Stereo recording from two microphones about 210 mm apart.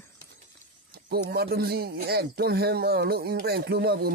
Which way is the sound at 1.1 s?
50° right (ahead or behind).